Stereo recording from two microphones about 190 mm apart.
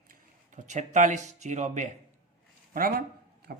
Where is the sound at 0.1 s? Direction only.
40° right (ahead or behind).